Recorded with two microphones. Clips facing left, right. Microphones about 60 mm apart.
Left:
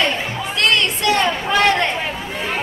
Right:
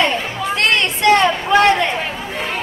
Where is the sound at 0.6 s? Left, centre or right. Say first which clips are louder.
Even; right.